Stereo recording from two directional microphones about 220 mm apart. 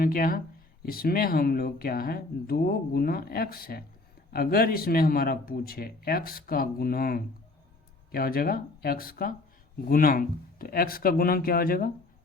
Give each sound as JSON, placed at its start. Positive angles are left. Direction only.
{"t": 0.0, "sound": "speech", "side_deg": 40}